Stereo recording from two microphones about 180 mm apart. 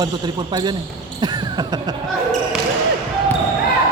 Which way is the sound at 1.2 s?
20° right (ahead or behind).